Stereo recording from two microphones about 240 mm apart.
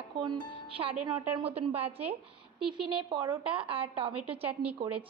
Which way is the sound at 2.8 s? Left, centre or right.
Right.